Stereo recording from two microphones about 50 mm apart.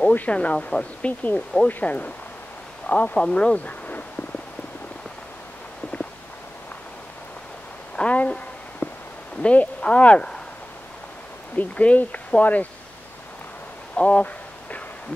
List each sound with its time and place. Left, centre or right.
0.3 s speech: left
3.2 s speech: centre
7.9 s a sound: left
9.4 s speech: left
11.5 s speech: left
14.0 s a sound: left